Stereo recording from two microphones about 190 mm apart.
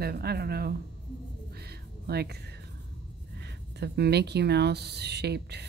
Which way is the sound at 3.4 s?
60° right (ahead or behind).